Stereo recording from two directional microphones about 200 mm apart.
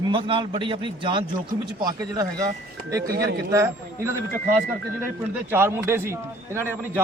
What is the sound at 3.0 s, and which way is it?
Speech, 50° right (ahead or behind).